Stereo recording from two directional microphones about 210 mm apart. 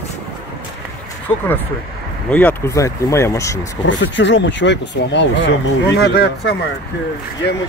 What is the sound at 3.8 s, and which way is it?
Speech, 60° left (ahead or behind).